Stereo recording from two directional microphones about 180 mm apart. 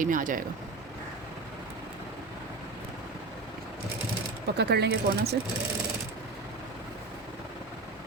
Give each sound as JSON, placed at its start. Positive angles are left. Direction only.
{"t": 0.0, "sound": "speech", "side_deg": -50}
{"t": 4.5, "sound": "speech", "side_deg": -65}